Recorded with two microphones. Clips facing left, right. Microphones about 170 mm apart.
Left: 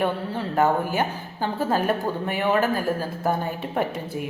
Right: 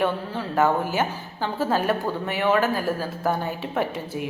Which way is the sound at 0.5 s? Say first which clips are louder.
Even; 50° left (ahead or behind).